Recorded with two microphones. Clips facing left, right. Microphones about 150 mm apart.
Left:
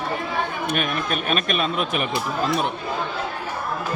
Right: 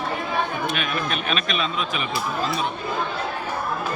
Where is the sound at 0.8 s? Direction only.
45° left (ahead or behind).